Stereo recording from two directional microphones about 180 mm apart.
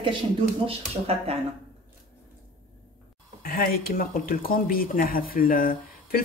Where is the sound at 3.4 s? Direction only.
55° left (ahead or behind).